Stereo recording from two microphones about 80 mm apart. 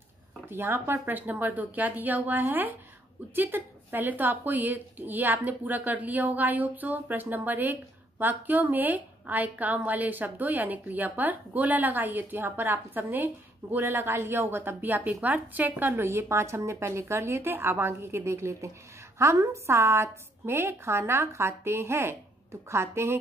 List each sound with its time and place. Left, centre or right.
0.5 s a woman's voice: right
15.9 s a woman's voice: right